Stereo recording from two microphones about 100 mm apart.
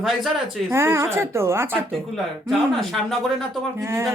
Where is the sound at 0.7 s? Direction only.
25° right (ahead or behind).